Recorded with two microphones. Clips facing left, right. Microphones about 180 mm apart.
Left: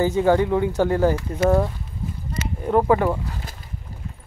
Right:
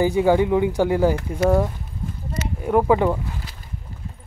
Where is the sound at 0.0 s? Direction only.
10° right (ahead or behind).